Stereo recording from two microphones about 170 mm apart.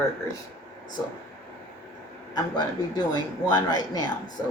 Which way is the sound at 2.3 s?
25° left (ahead or behind).